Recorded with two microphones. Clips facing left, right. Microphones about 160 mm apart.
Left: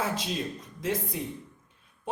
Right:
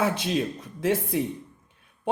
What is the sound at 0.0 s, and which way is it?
A man's voice, 70° right (ahead or behind).